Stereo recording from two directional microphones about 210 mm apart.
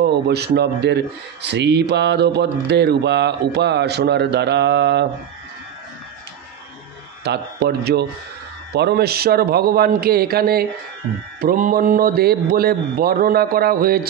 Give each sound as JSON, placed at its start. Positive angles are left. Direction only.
{"t": 0.0, "sound": "speech", "side_deg": -50}
{"t": 7.2, "sound": "speech", "side_deg": -50}